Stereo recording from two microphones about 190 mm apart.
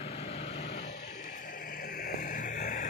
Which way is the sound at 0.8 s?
70° left (ahead or behind).